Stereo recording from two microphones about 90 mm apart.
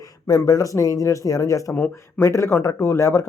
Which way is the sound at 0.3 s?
40° left (ahead or behind).